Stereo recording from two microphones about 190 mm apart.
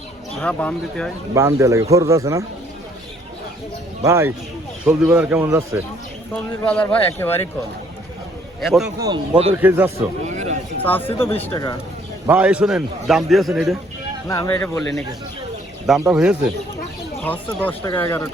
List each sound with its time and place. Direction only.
0.3 s a man's voice: 5° left (ahead or behind)
1.3 s speech: 15° right (ahead or behind)
4.0 s speech: 15° right (ahead or behind)
6.3 s speech: 10° left (ahead or behind)
8.6 s a man's voice: centre (ahead or behind)
9.0 s speech: 20° right (ahead or behind)
9.6 s speech: 10° right (ahead or behind)
10.2 s a sound: 40° right (ahead or behind)
10.8 s speech: 10° left (ahead or behind)
12.3 s a man's voice: 5° right (ahead or behind)
14.3 s speech: 20° left (ahead or behind)
14.6 s a man's voice: 5° left (ahead or behind)
16.0 s a man's voice: 5° right (ahead or behind)
17.2 s speech: 10° left (ahead or behind)